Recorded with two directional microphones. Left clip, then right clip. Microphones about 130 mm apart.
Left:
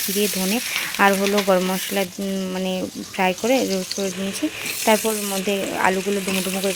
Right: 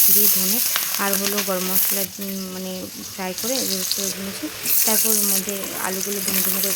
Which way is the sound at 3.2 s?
30° left (ahead or behind).